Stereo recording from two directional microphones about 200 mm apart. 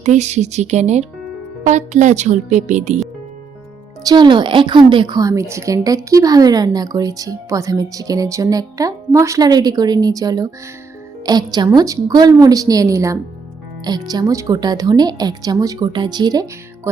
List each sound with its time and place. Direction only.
0.0 s speech: 35° right (ahead or behind)
4.0 s a woman's voice: 20° right (ahead or behind)